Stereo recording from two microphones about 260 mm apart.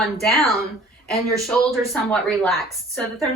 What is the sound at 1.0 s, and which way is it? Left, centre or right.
A woman's voice, centre.